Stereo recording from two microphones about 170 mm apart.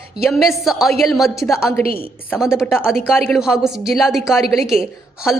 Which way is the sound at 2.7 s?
10° left (ahead or behind).